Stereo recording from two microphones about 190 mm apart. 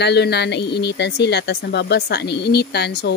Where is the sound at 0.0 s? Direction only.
60° left (ahead or behind).